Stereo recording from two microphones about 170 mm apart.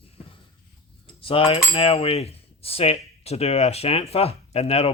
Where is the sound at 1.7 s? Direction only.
35° left (ahead or behind).